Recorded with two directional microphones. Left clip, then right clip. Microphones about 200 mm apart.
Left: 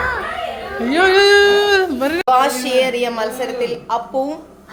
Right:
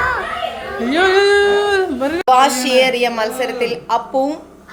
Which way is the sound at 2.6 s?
10° right (ahead or behind).